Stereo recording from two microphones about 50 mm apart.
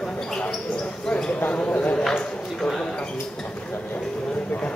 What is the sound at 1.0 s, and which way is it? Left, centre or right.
Speech, centre.